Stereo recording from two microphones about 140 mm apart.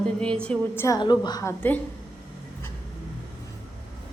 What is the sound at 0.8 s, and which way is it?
Speech, 25° left (ahead or behind).